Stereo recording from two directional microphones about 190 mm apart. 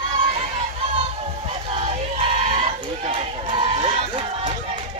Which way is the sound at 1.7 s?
30° right (ahead or behind).